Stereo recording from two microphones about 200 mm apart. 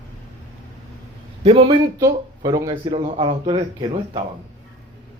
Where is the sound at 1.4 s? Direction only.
30° right (ahead or behind).